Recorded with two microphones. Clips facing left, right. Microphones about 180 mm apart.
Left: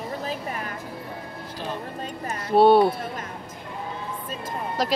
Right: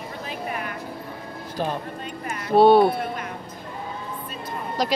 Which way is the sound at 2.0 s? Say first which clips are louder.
Left 1 dB; 40° left (ahead or behind).